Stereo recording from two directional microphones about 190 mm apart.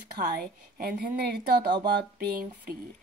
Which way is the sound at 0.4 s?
55° right (ahead or behind).